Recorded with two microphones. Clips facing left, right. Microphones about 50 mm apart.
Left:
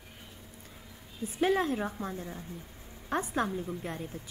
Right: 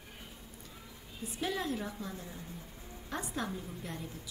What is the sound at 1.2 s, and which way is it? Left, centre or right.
Speech, left.